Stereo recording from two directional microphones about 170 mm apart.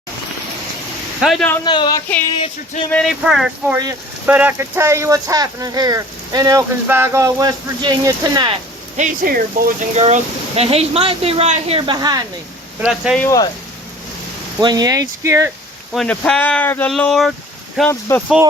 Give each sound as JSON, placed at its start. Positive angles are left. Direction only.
{"t": 1.2, "sound": "speech", "side_deg": 0}
{"t": 1.6, "sound": "speech", "side_deg": 25}
{"t": 2.3, "sound": "music", "side_deg": 35}
{"t": 2.9, "sound": "speech", "side_deg": 0}
{"t": 9.0, "sound": "speech", "side_deg": -50}
{"t": 9.9, "sound": "speech", "side_deg": -40}
{"t": 11.8, "sound": "speech", "side_deg": -25}
{"t": 12.8, "sound": "speech", "side_deg": -5}
{"t": 13.1, "sound": "speech", "side_deg": 15}
{"t": 14.6, "sound": "speech", "side_deg": -25}
{"t": 16.0, "sound": "speech", "side_deg": 5}